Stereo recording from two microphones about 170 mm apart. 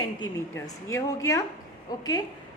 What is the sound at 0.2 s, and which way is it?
A woman's voice, 20° left (ahead or behind).